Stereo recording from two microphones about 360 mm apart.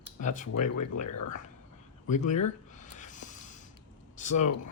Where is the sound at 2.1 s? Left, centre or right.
Centre.